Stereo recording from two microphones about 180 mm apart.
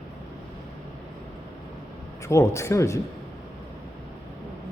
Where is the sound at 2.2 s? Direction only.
15° left (ahead or behind).